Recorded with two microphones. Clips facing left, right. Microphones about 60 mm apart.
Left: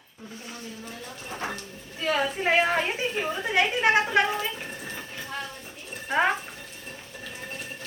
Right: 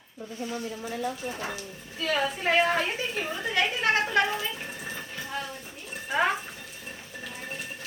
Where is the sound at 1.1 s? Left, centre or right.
Centre.